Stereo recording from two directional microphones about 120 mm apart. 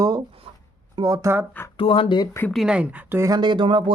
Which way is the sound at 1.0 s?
25° right (ahead or behind).